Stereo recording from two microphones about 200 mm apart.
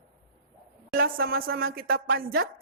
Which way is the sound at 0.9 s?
50° right (ahead or behind).